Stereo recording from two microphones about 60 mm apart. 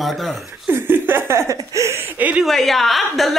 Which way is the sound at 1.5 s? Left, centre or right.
Right.